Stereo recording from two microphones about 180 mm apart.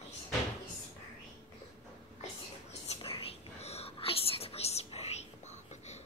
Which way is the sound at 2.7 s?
35° left (ahead or behind).